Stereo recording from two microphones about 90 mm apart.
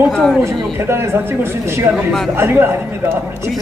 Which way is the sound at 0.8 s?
30° right (ahead or behind).